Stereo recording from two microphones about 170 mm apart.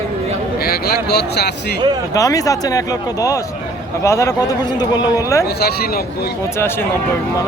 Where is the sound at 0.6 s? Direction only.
70° left (ahead or behind).